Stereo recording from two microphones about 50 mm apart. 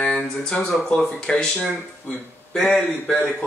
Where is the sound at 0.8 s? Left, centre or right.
Centre.